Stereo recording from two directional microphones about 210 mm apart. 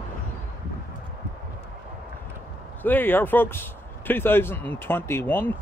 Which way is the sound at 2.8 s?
10° left (ahead or behind).